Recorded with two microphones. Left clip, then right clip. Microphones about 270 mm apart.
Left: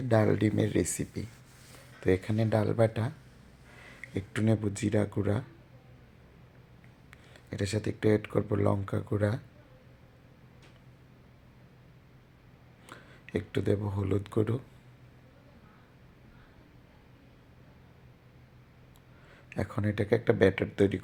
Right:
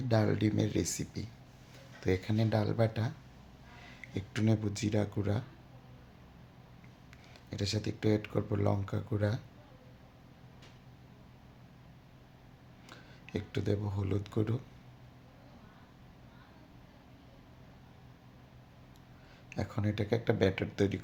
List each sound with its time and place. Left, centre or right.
0.1 s speech: centre
4.1 s speech: centre
7.5 s speech: centre
12.9 s speech: centre
19.5 s speech: centre